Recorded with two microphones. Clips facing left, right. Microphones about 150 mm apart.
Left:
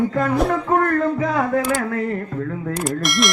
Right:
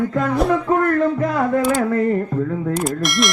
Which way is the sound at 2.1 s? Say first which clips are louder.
Right 5 dB; 20° right (ahead or behind).